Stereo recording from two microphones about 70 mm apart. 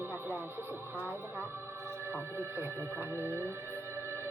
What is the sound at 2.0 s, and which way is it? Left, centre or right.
Music, right.